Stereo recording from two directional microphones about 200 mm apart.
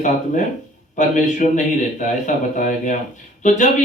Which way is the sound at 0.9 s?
35° left (ahead or behind).